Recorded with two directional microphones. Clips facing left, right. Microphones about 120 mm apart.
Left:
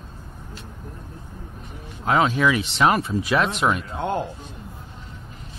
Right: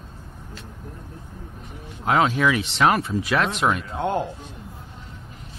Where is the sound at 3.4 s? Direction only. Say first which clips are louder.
Even; 10° left (ahead or behind).